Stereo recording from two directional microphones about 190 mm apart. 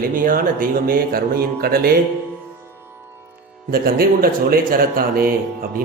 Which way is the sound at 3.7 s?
50° right (ahead or behind).